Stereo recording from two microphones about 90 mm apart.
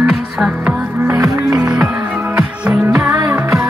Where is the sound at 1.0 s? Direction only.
35° right (ahead or behind).